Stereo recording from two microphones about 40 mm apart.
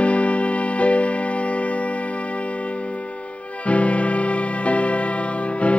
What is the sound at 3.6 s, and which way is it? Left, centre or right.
Music, left.